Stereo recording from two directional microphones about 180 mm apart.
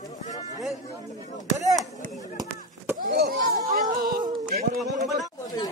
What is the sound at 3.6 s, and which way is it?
Music, 45° right (ahead or behind).